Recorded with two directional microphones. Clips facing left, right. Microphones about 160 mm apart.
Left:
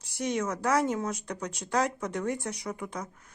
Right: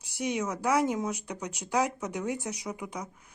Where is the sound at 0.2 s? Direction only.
10° right (ahead or behind).